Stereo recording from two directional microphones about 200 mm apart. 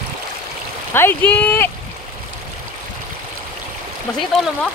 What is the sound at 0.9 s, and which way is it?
Speech, 10° left (ahead or behind).